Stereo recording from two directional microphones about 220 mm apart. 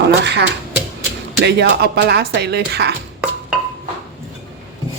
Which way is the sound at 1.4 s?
50° right (ahead or behind).